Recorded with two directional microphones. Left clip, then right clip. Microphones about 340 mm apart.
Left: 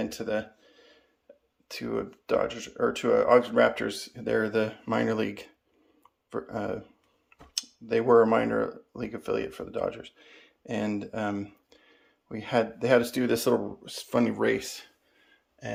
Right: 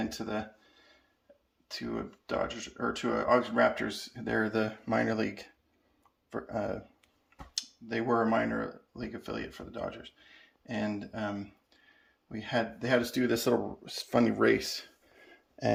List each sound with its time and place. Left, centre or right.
0.0 s speech: centre
1.6 s speech: centre
15.2 s a sound: centre